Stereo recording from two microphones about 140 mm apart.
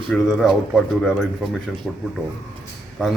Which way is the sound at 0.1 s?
Centre (ahead or behind).